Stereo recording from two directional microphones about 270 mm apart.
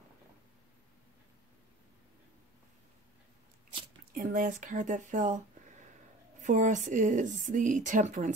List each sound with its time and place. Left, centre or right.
4.1 s speech: right
6.4 s speech: right